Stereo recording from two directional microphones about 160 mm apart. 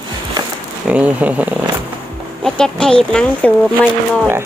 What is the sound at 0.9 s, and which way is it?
Speech, 10° right (ahead or behind).